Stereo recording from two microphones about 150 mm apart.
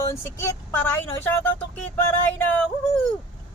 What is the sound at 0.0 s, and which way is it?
Speech, 15° left (ahead or behind).